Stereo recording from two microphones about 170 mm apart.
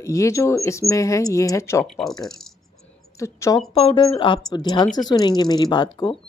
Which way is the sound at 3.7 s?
35° left (ahead or behind).